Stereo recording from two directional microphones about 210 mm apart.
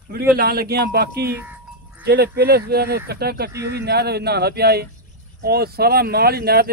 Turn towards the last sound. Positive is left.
turn(degrees=-45)  # may be behind; listen again after turning